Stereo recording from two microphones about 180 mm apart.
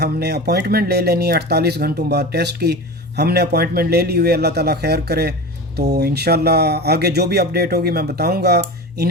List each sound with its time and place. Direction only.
0.0 s speech: 65° right (ahead or behind)